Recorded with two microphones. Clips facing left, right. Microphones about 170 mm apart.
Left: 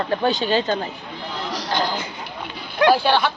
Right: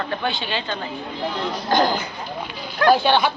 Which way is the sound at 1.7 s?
45° right (ahead or behind).